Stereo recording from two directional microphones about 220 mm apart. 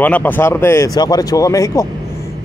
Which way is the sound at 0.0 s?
5° left (ahead or behind).